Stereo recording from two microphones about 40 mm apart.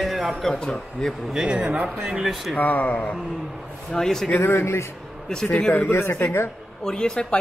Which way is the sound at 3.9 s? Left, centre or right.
Centre.